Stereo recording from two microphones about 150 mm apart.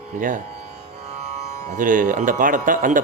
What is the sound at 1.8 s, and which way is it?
Speech, 60° right (ahead or behind).